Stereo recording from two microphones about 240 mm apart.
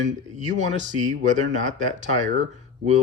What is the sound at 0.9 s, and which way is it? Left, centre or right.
Speech, right.